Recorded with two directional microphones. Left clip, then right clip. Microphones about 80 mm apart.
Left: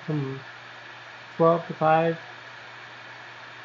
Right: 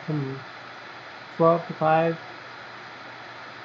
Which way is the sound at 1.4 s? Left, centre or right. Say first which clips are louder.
Right 1 dB; right.